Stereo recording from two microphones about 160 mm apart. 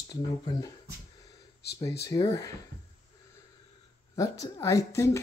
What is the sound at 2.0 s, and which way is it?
Speech, 20° left (ahead or behind).